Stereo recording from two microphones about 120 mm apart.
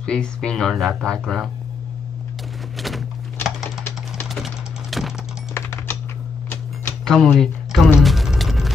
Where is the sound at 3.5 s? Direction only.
5° right (ahead or behind).